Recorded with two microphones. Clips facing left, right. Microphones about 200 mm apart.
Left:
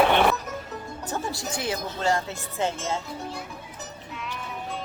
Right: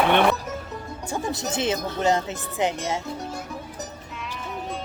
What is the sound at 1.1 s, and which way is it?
Speech, 20° right (ahead or behind).